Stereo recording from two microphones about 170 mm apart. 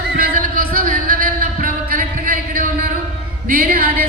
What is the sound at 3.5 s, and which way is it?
Speech, 60° right (ahead or behind).